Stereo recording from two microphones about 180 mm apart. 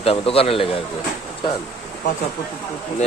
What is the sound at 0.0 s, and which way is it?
Speech, 30° left (ahead or behind).